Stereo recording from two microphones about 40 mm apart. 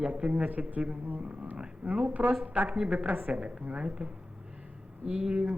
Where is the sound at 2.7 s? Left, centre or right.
Right.